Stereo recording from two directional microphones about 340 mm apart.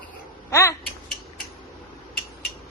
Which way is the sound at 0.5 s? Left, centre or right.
Centre.